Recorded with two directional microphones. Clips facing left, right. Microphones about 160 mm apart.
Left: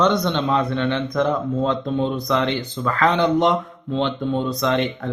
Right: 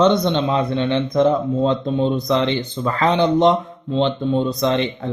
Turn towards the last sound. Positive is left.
turn(degrees=-20)  # may be behind; listen again after turning